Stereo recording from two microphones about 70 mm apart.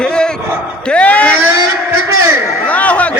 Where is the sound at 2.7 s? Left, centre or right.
Centre.